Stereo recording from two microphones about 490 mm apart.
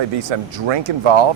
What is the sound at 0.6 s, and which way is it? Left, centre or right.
Speech, right.